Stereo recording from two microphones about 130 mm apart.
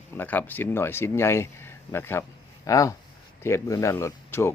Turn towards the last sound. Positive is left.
turn(degrees=20)  # may be behind; listen again after turning